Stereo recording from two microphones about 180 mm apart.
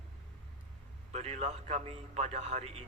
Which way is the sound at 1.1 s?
40° right (ahead or behind).